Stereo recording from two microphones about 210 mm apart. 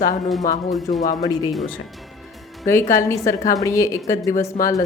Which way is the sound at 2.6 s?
15° left (ahead or behind).